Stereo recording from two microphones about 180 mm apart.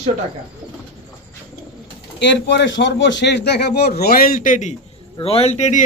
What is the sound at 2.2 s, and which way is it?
A man's voice, 80° left.